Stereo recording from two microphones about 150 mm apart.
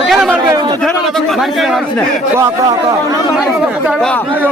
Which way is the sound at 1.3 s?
Centre (ahead or behind).